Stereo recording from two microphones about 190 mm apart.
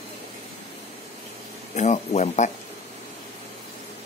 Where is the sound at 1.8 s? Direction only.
40° left (ahead or behind).